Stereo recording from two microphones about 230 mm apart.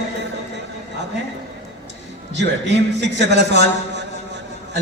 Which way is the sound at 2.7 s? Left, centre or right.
Right.